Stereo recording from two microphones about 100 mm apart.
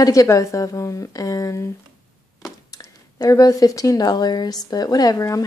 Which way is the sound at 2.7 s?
35° left (ahead or behind).